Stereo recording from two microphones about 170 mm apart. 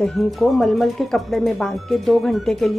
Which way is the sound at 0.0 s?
Centre (ahead or behind).